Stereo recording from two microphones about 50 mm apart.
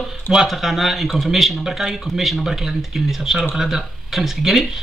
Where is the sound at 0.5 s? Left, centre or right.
Centre.